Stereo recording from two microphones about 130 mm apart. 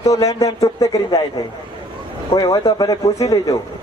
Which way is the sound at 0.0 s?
25° left (ahead or behind).